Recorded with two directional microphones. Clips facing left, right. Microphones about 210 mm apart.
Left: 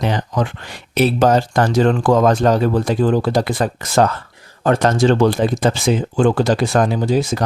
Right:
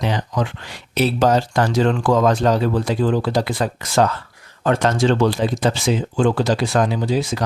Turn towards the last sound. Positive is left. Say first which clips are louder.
# left 3 dB
turn(degrees=45)  # may be behind; listen again after turning